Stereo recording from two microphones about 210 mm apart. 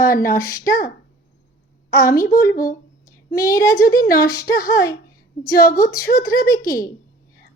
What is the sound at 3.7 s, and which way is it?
Speech, 45° left (ahead or behind).